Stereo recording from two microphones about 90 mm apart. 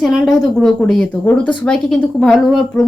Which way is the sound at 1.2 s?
20° left (ahead or behind).